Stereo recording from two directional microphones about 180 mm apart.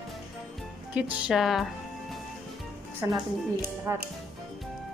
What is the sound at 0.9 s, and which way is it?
Speech, 10° right (ahead or behind).